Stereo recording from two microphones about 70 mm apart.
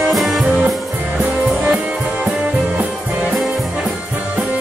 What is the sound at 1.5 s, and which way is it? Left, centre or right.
Music, centre.